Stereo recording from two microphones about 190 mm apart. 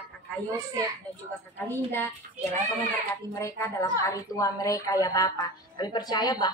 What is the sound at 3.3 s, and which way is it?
A woman's voice, 15° left (ahead or behind).